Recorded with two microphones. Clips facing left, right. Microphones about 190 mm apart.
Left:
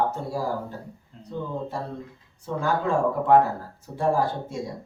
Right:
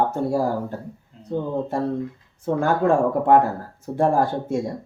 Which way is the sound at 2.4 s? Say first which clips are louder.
Right 6 dB; 50° right (ahead or behind).